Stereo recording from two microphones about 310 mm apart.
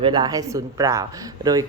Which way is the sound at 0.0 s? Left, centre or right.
Centre.